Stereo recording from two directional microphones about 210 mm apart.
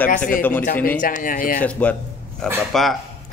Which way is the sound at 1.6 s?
5° left (ahead or behind).